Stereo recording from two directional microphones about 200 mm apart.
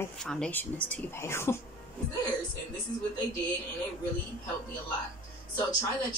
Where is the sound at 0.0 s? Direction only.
5° left (ahead or behind).